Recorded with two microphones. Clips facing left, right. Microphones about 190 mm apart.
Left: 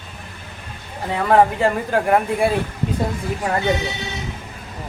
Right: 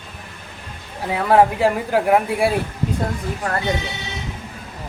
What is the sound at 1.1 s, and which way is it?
A man's voice, 5° right (ahead or behind).